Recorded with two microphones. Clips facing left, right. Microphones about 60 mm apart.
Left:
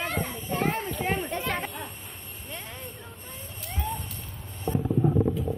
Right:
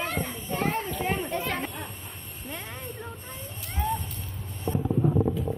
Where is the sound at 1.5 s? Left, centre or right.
Centre.